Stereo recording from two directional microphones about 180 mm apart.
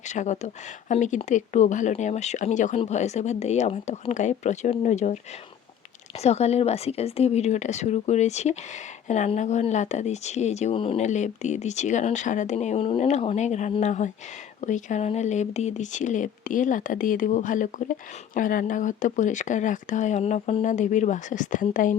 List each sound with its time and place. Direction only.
0.1 s speech: 40° left (ahead or behind)